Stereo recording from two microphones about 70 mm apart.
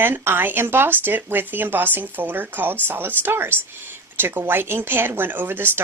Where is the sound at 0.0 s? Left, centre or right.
Right.